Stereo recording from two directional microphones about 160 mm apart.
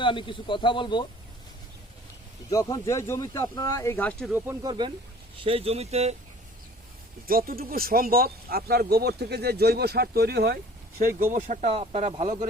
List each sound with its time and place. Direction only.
0.0 s speech: 30° left (ahead or behind)
2.5 s speech: 20° left (ahead or behind)
4.3 s speech: 10° right (ahead or behind)
4.6 s speech: 30° right (ahead or behind)
7.3 s speech: 65° right (ahead or behind)
11.2 s speech: 55° right (ahead or behind)